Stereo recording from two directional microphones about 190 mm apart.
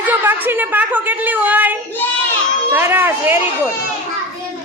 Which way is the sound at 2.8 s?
10° right (ahead or behind).